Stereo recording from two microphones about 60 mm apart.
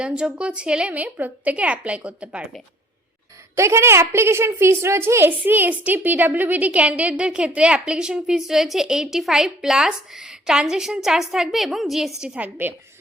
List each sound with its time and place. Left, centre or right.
0.0 s a woman's voice: centre
3.5 s a woman's voice: right; by 12.1 s centre
12.4 s a woman's voice: centre